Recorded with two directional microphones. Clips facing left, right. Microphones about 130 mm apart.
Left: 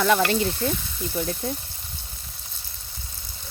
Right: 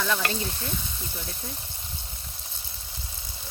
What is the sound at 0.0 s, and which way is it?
Speech, 70° left (ahead or behind).